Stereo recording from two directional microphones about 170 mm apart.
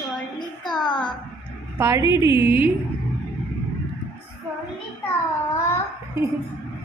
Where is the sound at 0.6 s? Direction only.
25° left (ahead or behind).